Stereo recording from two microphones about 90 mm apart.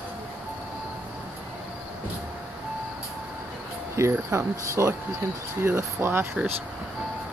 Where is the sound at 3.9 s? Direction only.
30° right (ahead or behind).